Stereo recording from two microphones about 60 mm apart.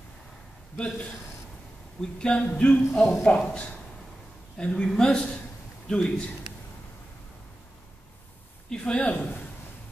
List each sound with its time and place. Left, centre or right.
0.7 s speech: centre
8.6 s a man's voice: centre